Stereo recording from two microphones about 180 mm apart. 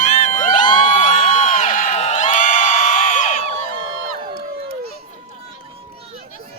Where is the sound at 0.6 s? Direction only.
25° left (ahead or behind).